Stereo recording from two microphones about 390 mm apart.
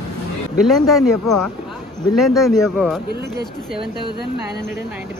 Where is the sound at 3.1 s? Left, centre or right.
Right.